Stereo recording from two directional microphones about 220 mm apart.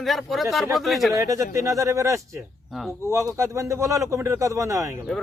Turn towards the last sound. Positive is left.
turn(degrees=-15)  # may be behind; listen again after turning